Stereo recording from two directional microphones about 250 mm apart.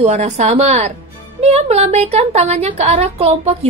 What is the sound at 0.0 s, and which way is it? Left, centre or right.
A woman's voice, right.